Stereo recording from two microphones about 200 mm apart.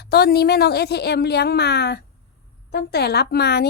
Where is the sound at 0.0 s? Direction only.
55° left (ahead or behind).